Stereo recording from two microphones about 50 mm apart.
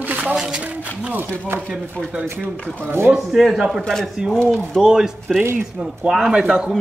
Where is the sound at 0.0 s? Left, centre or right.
Right.